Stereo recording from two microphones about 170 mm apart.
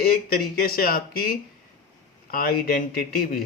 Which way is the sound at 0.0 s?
60° left (ahead or behind).